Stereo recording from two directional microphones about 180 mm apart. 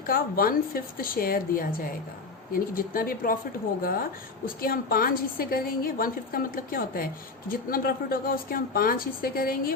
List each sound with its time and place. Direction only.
0.1 s a woman's voice: 55° left (ahead or behind)
4.4 s a woman's voice: 55° left (ahead or behind)